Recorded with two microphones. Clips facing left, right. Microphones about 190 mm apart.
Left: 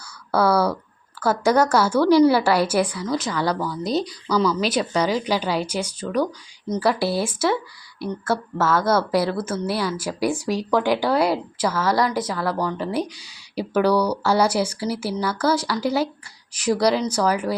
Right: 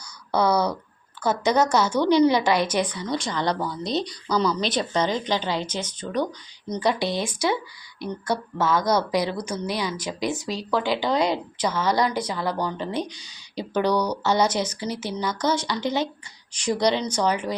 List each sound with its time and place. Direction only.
0.3 s speech: 5° left (ahead or behind)
9.1 s a woman's voice: 15° right (ahead or behind)
9.4 s speech: 5° left (ahead or behind)